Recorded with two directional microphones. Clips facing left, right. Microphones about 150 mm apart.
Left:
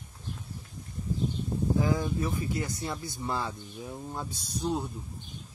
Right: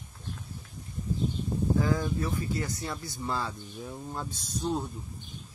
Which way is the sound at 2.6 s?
25° left (ahead or behind).